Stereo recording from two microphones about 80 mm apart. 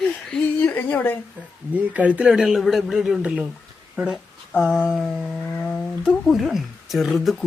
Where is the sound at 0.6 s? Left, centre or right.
Left.